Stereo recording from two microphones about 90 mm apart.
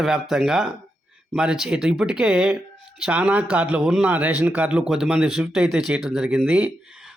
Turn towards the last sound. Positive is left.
turn(degrees=-10)  # may be behind; listen again after turning